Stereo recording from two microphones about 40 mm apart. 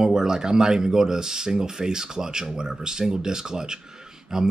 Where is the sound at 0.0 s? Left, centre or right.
Centre.